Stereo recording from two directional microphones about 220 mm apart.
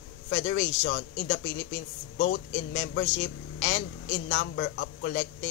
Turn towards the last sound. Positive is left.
turn(degrees=50)  # may be behind; listen again after turning